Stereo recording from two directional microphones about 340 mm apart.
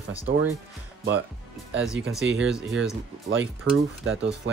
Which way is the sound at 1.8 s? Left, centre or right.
Centre.